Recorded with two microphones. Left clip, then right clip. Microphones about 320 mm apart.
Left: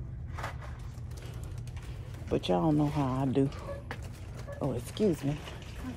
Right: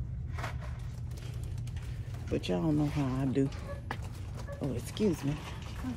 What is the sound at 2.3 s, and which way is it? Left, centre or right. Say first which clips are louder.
Speech: left 4 dB; centre.